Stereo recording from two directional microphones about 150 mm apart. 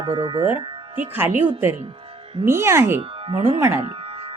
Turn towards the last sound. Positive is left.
turn(degrees=-15)  # may be behind; listen again after turning